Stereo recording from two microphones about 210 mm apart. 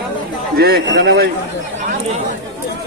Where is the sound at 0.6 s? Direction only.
50° right (ahead or behind).